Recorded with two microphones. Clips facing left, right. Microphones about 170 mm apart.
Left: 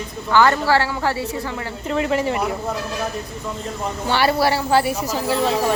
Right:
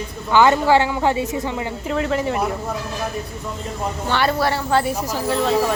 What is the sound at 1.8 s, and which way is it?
Speech, centre (ahead or behind).